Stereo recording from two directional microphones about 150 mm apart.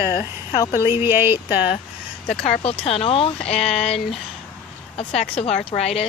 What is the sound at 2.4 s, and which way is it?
A woman's voice, 45° left (ahead or behind).